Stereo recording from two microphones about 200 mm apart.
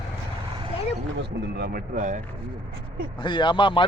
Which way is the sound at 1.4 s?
50° right (ahead or behind).